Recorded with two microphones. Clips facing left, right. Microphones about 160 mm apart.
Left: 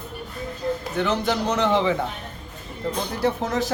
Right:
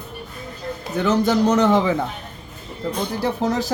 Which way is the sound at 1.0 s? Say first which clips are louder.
Right 7 dB; 40° right (ahead or behind).